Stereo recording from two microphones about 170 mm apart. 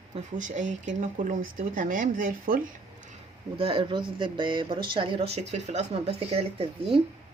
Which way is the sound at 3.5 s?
30° right (ahead or behind).